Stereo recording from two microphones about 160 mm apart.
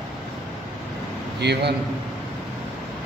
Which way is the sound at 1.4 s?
90° right.